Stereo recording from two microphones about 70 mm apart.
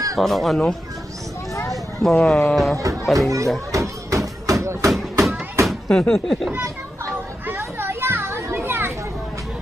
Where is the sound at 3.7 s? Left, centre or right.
Right.